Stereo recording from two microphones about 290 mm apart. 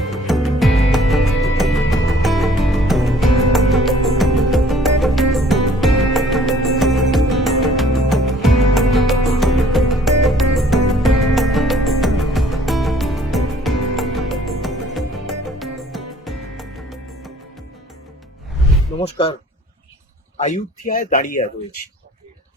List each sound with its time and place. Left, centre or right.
0.1 s music: centre
19.0 s basketball bounce: centre
20.3 s speech: left